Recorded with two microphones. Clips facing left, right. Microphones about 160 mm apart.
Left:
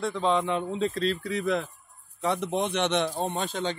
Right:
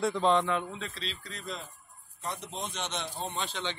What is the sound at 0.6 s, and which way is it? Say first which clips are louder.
Speech: left 9 dB; 35° left (ahead or behind).